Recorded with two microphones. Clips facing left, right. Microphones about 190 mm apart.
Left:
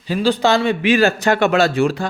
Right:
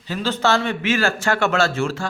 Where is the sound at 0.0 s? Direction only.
15° left (ahead or behind).